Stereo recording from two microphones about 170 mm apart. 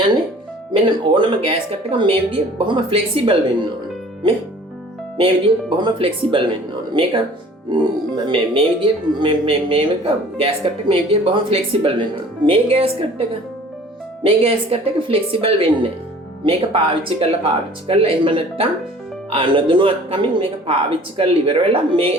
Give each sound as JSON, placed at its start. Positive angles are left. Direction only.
{"t": 0.7, "sound": "a woman's voice", "side_deg": -30}
{"t": 5.1, "sound": "a woman's voice", "side_deg": -30}
{"t": 8.3, "sound": "a woman's voice", "side_deg": -30}
{"t": 14.3, "sound": "a woman's voice", "side_deg": -35}